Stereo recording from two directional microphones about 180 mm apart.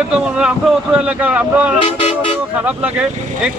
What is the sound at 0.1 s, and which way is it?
A man's voice, 5° right (ahead or behind).